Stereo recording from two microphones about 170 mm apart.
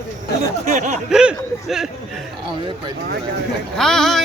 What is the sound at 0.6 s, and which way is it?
Speech, 45° right (ahead or behind).